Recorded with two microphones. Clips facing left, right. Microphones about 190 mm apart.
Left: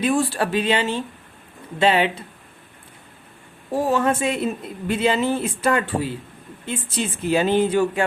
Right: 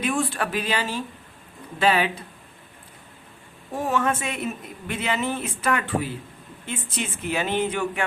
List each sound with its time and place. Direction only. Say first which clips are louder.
0.0 s speech: left 5 dB; 35° left (ahead or behind)
3.7 s speech: left 4 dB; 35° left (ahead or behind)